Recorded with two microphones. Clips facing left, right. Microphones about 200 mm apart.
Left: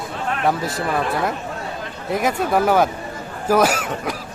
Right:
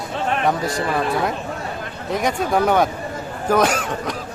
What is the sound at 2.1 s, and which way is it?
Speech, 5° left (ahead or behind).